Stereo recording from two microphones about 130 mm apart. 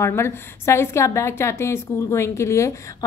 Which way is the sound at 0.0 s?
20° left (ahead or behind).